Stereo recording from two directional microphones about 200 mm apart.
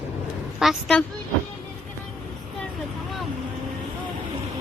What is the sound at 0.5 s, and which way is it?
Speech, centre (ahead or behind).